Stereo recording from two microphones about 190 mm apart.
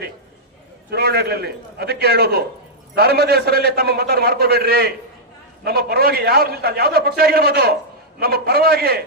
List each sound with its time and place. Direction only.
0.9 s a man's voice: 55° right (ahead or behind)